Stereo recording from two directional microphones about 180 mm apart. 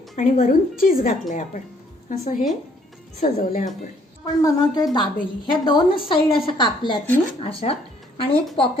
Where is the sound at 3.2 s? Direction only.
50° left (ahead or behind).